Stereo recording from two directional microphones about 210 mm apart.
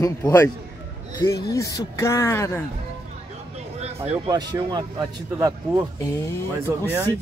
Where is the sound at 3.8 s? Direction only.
30° right (ahead or behind).